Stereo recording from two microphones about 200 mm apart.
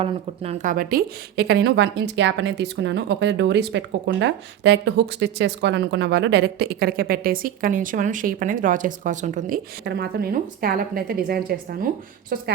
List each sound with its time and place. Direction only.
0.0 s a woman's voice: 30° right (ahead or behind)
9.8 s a woman's voice: 55° right (ahead or behind)